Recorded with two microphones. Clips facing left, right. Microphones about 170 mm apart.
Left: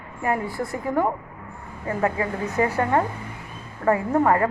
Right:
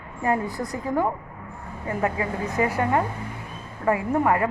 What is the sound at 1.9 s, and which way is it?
Speech, 30° left (ahead or behind).